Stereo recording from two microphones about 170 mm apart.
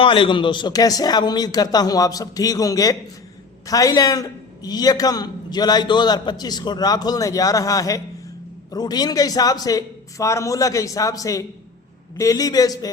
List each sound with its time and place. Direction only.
0.0 s a man's voice: 30° left (ahead or behind)